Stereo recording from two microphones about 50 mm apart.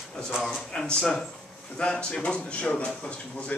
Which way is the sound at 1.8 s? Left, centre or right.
Left.